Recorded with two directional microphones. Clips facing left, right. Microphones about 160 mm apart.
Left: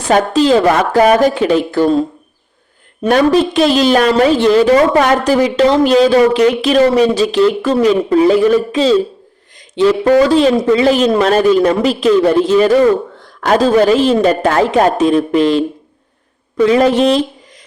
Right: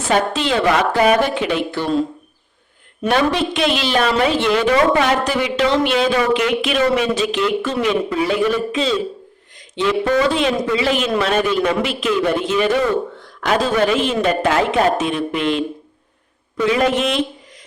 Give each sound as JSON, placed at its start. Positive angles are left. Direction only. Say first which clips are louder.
{"t": 0.1, "sound": "a man's voice", "louder": "left 8 dB", "side_deg": 40}